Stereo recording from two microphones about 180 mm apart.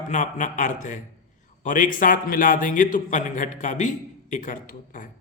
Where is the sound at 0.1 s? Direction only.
45° left (ahead or behind).